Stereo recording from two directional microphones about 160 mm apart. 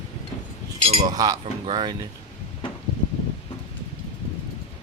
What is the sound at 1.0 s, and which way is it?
Speech, 25° right (ahead or behind).